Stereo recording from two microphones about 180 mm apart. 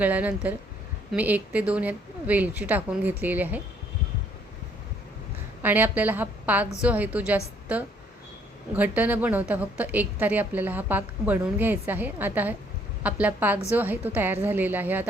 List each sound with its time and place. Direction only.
0.0 s a woman's voice: 10° right (ahead or behind)
5.6 s a woman's voice: 10° right (ahead or behind)